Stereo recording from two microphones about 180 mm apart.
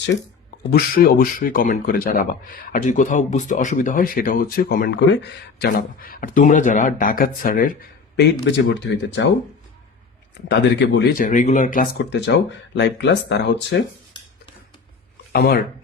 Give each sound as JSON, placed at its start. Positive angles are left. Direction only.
{"t": 0.7, "sound": "speech", "side_deg": 55}
{"t": 5.1, "sound": "speech", "side_deg": 65}
{"t": 8.1, "sound": "speech", "side_deg": 70}
{"t": 10.5, "sound": "speech", "side_deg": 80}
{"t": 11.1, "sound": "speech", "side_deg": 50}
{"t": 12.1, "sound": "speech", "side_deg": 80}
{"t": 15.3, "sound": "speech", "side_deg": 60}